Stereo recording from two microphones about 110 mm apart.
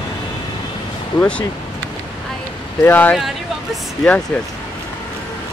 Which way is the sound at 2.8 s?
15° left (ahead or behind).